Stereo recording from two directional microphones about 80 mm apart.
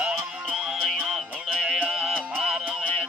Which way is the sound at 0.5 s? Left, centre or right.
Centre.